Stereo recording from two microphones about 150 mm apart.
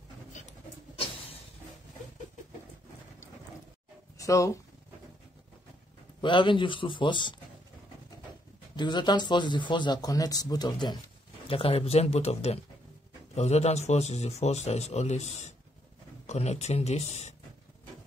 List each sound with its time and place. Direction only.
4.2 s speech: 20° left (ahead or behind)
6.2 s speech: 30° left (ahead or behind)
8.7 s speech: 30° left (ahead or behind)
11.4 s a man's voice: 40° left (ahead or behind)